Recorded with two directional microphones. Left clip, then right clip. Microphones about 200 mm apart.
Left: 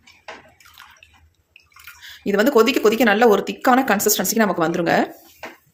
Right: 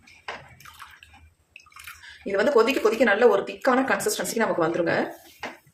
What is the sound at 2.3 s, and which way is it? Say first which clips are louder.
A woman's voice: left 4 dB; 50° left (ahead or behind).